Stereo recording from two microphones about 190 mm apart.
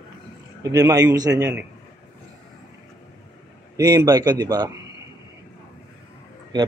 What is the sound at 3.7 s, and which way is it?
Speech, 20° right (ahead or behind).